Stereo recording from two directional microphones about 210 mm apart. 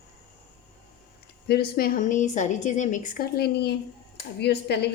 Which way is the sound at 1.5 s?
45° left (ahead or behind).